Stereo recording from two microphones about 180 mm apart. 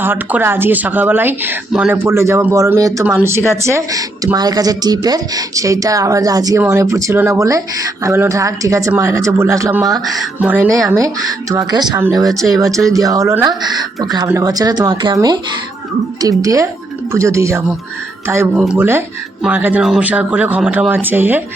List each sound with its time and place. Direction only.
0.0 s speech: 10° right (ahead or behind)
16.4 s speech: 20° right (ahead or behind)